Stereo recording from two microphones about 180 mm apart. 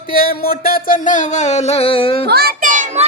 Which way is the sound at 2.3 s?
60° right (ahead or behind).